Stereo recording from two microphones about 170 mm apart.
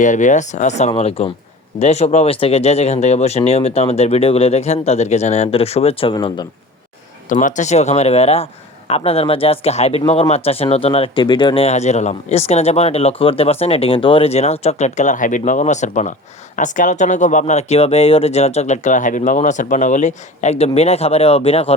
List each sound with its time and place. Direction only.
0.0 s speech: 45° left (ahead or behind); by 6.5 s 25° left (ahead or behind)
7.3 s speech: 50° left (ahead or behind)